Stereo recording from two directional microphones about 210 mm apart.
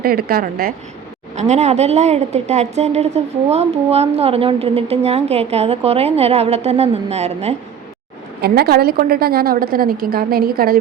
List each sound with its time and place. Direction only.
0.0 s a woman's voice: 45° right (ahead or behind)
1.4 s a woman's voice: 30° right (ahead or behind)
8.4 s a woman's voice: 50° right (ahead or behind)